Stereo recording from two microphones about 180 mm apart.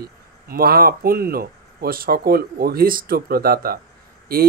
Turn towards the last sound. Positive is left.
turn(degrees=-55)  # may be behind; listen again after turning